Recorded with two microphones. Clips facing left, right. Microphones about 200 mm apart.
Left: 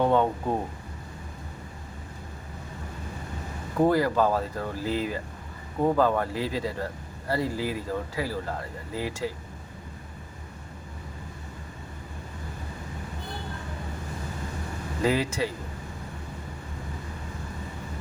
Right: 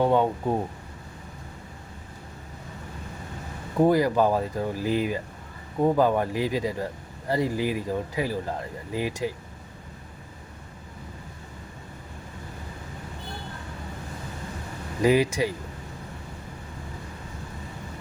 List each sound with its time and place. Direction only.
0.0 s speech: 5° right (ahead or behind)
3.8 s speech: 15° right (ahead or behind)
15.0 s speech: 15° right (ahead or behind)